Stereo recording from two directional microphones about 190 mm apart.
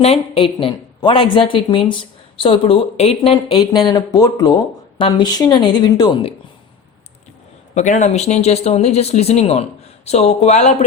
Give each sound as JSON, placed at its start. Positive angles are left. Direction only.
{"t": 0.0, "sound": "speech", "side_deg": 30}
{"t": 7.8, "sound": "speech", "side_deg": 40}